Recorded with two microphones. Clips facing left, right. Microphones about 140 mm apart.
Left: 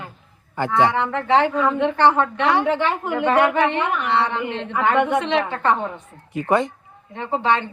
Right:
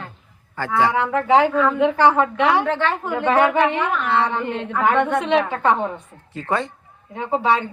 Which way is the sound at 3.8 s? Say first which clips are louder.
Even; 15° left (ahead or behind).